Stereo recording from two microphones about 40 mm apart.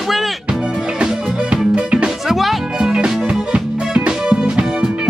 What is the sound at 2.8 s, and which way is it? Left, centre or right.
Music, right.